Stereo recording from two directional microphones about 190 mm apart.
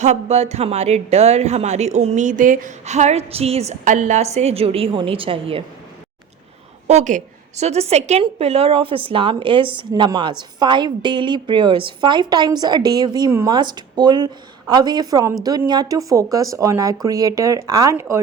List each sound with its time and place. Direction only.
0.0 s speech: 35° right (ahead or behind)
6.8 s a woman's voice: 40° right (ahead or behind); by 18.2 s 15° right (ahead or behind)